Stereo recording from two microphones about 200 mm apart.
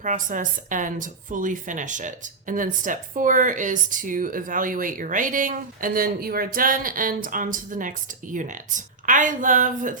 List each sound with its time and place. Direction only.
0.0 s a woman's voice: 40° right (ahead or behind)